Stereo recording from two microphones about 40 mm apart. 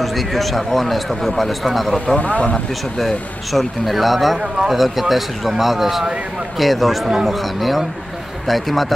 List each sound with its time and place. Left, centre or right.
0.0 s a man's voice: centre
2.1 s speech: left
3.0 s a man's voice: centre
4.4 s speech: centre
4.7 s a man's voice: centre